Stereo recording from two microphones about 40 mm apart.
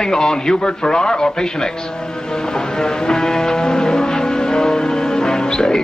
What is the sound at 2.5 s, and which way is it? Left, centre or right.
Music, centre.